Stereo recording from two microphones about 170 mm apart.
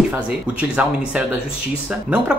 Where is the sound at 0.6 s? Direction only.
5° right (ahead or behind).